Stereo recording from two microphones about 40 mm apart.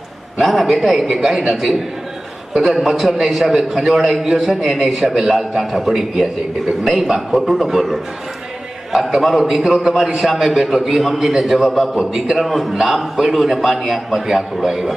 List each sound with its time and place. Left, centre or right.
0.4 s a man's voice: centre
5.6 s a man's voice: centre
8.9 s a man's voice: centre